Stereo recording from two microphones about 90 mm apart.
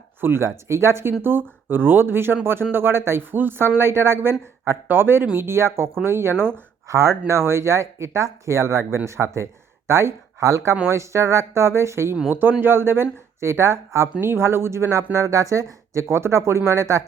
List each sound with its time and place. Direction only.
0.2 s speech: 25° right (ahead or behind)